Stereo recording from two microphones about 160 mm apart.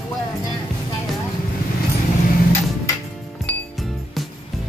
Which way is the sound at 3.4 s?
Centre (ahead or behind).